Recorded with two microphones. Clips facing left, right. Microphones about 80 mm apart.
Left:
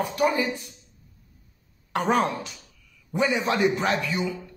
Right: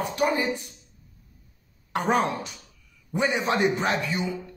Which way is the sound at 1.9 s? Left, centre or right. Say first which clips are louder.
Left 1 dB; right.